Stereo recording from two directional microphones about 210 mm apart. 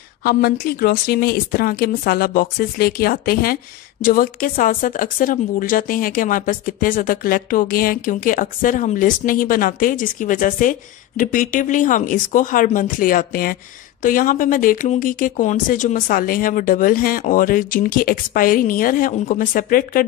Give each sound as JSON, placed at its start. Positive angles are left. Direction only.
{"t": 0.2, "sound": "a woman's voice", "side_deg": 45}